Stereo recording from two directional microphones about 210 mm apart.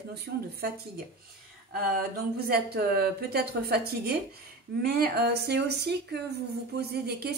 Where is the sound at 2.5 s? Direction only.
45° right (ahead or behind).